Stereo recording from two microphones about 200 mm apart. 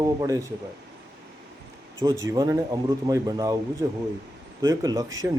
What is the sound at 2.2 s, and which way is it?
A man's voice, 15° right (ahead or behind).